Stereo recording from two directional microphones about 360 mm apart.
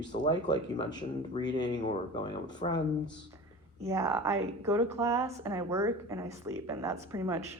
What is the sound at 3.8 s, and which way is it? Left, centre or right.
A woman's voice, centre.